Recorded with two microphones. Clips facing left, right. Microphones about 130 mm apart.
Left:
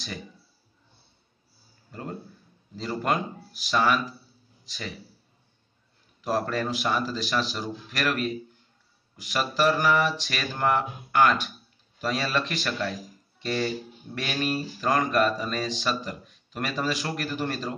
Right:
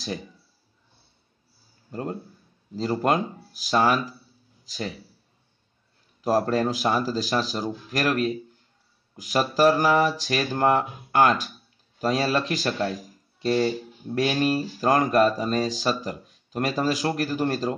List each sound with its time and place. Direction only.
1.9 s speech: 30° right (ahead or behind)
6.2 s speech: 35° right (ahead or behind)